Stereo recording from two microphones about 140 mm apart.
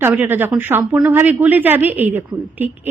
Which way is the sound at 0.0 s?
15° right (ahead or behind).